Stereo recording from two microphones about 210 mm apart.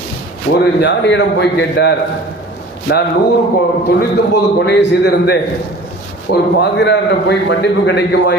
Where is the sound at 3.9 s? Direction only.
55° left (ahead or behind).